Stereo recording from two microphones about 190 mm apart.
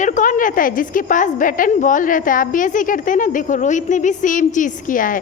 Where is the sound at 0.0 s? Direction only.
45° left (ahead or behind).